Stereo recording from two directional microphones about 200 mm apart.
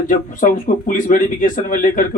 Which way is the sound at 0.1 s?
40° left (ahead or behind).